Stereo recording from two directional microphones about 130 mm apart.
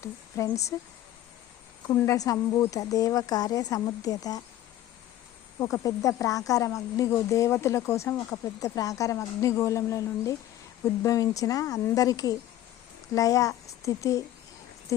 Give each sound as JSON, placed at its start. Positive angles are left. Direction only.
{"t": 0.4, "sound": "speech", "side_deg": 25}
{"t": 1.9, "sound": "speech", "side_deg": 30}
{"t": 5.5, "sound": "speech", "side_deg": 25}